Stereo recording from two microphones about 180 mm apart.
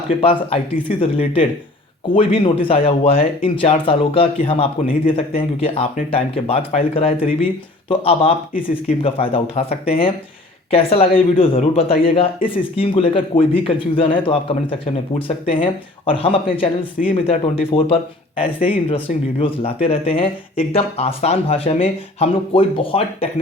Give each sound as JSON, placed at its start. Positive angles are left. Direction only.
{"t": 0.2, "sound": "speech", "side_deg": 30}
{"t": 17.0, "sound": "speech", "side_deg": 45}
{"t": 17.7, "sound": "speech", "side_deg": 30}